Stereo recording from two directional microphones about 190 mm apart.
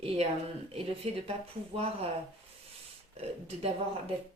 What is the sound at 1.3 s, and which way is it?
Speech, 30° right (ahead or behind).